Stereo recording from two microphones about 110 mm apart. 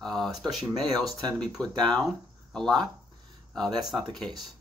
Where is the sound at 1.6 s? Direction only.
40° right (ahead or behind).